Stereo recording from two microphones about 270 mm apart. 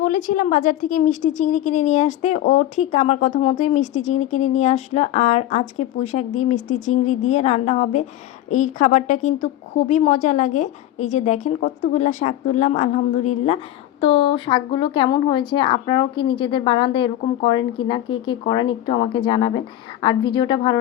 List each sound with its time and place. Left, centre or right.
0.0 s a woman's voice: left